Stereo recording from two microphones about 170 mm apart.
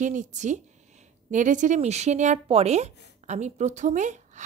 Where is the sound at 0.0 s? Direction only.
45° right (ahead or behind).